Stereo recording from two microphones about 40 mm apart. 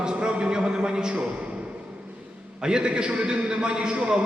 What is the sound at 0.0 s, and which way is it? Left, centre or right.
A man's voice, right.